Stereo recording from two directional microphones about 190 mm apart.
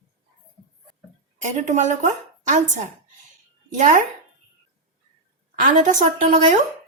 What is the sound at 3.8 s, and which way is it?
Speech, 40° right (ahead or behind).